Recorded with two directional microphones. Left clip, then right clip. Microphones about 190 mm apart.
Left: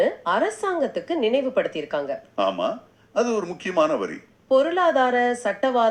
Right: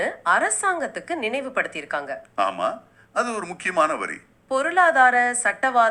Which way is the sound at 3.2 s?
50° right (ahead or behind).